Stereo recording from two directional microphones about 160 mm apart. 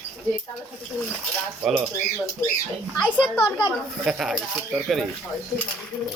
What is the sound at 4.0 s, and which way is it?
Speech, centre (ahead or behind).